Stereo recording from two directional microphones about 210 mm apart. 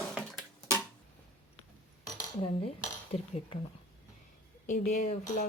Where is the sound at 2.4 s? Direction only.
30° left (ahead or behind).